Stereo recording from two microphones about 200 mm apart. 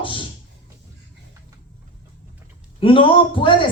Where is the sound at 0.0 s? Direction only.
25° left (ahead or behind).